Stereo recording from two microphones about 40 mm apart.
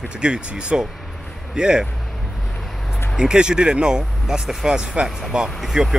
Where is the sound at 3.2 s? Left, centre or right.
Centre.